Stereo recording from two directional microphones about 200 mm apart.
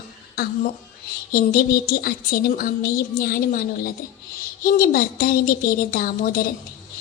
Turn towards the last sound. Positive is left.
turn(degrees=45)  # may be behind; listen again after turning